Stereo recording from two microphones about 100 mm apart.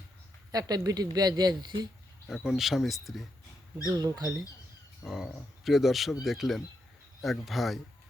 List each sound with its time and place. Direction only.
0.5 s speech: 40° right (ahead or behind)
2.2 s speech: 5° right (ahead or behind)
3.8 s speech: 45° right (ahead or behind)
5.0 s speech: 5° right (ahead or behind)